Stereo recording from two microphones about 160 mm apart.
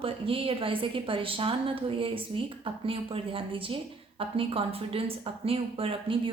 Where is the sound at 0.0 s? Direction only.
35° right (ahead or behind).